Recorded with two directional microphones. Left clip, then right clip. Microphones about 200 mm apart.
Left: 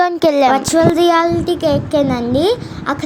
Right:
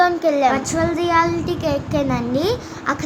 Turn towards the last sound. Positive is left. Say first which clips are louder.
# left 3 dB
turn(degrees=15)  # may be behind; listen again after turning